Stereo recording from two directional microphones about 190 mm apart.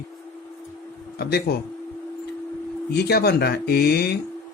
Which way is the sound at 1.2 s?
60° left (ahead or behind).